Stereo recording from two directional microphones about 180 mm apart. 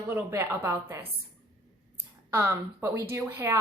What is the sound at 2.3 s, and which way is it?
A woman's voice, 15° right (ahead or behind).